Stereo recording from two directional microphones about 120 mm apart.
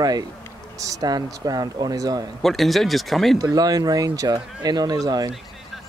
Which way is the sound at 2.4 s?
Centre (ahead or behind).